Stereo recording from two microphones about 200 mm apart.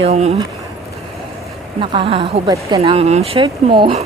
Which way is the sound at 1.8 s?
25° right (ahead or behind).